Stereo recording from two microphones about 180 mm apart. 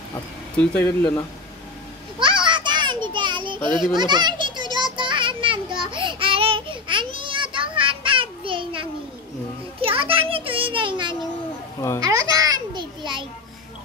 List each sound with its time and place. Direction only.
0.6 s speech: 10° left (ahead or behind)
2.1 s children playing: 25° right (ahead or behind)
4.7 s a sound: 25° right (ahead or behind)
12.0 s music: 20° right (ahead or behind)